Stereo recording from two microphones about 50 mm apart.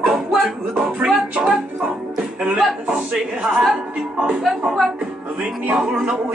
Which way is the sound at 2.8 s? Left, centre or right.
Centre.